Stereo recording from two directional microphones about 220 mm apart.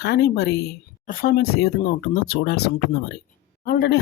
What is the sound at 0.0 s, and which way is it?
Speech, 45° left (ahead or behind).